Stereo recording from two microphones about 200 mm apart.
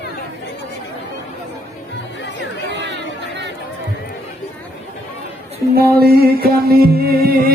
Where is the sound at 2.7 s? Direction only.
60° right (ahead or behind).